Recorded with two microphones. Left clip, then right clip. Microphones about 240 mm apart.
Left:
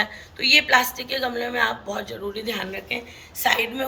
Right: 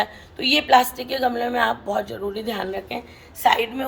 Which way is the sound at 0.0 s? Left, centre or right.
Right.